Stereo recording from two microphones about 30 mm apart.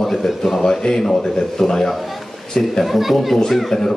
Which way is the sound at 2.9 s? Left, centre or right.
Centre.